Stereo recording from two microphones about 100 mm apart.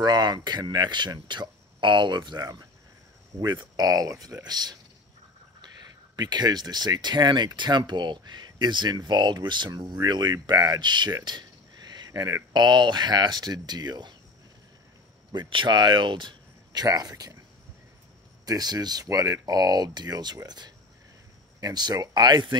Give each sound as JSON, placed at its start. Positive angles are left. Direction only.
{"t": 0.0, "sound": "speech", "side_deg": -40}
{"t": 6.1, "sound": "speech", "side_deg": -45}
{"t": 11.9, "sound": "a sound", "side_deg": -40}
{"t": 12.5, "sound": "speech", "side_deg": -45}
{"t": 15.3, "sound": "speech", "side_deg": -50}
{"t": 18.4, "sound": "speech", "side_deg": -40}